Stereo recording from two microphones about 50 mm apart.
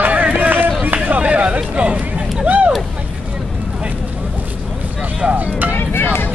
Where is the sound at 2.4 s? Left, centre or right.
Right.